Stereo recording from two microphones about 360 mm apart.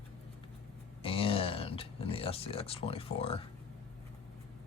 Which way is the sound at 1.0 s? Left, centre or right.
Centre.